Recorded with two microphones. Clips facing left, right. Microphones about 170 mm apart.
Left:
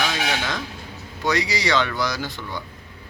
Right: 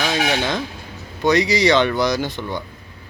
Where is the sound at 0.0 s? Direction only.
25° right (ahead or behind).